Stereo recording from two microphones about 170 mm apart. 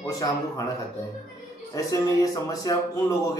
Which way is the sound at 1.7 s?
20° left (ahead or behind).